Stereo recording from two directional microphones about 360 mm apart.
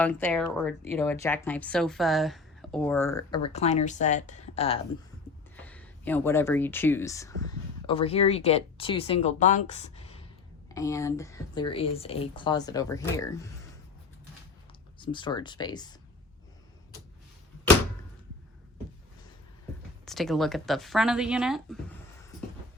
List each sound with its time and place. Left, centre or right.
0.0 s speech: centre
5.5 s speech: centre
14.9 s speech: centre
20.1 s speech: centre